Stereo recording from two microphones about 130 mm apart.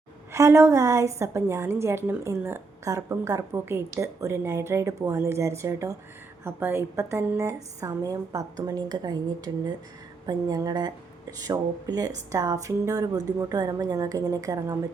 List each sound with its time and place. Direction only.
0.3 s a woman's voice: 20° right (ahead or behind)